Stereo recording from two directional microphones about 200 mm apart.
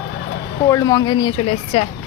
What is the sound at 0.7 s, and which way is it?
Speech, 15° left (ahead or behind).